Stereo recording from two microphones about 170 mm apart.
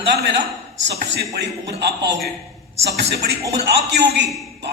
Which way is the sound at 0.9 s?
90° right.